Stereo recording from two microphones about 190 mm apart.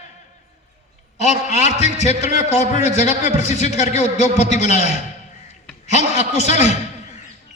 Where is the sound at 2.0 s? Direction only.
35° left (ahead or behind).